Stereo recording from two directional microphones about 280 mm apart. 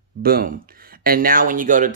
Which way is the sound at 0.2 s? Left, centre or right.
Right.